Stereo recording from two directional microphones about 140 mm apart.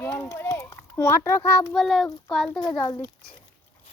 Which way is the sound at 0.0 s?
15° left (ahead or behind).